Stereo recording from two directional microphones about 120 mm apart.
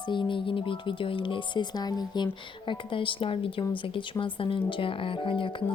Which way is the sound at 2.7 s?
45° left (ahead or behind).